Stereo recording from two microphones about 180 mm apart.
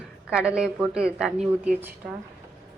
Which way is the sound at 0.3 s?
5° right (ahead or behind).